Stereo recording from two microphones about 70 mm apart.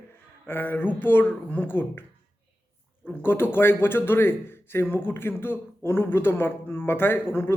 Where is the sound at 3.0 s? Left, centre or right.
Left.